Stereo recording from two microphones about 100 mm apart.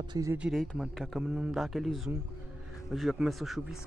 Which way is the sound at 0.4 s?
Centre (ahead or behind).